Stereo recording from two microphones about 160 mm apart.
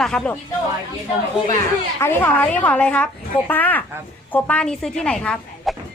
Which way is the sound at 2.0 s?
15° left (ahead or behind).